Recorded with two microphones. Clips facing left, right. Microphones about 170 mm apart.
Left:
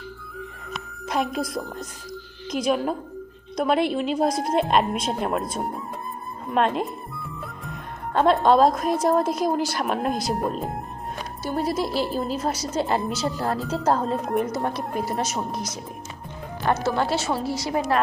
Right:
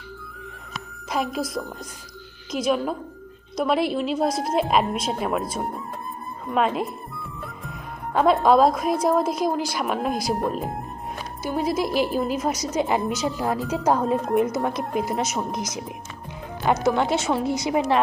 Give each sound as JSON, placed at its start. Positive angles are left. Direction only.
{"t": 0.7, "sound": "a woman's voice", "side_deg": 0}
{"t": 8.1, "sound": "a woman's voice", "side_deg": -5}
{"t": 11.4, "sound": "a woman's voice", "side_deg": -10}
{"t": 16.7, "sound": "a woman's voice", "side_deg": -10}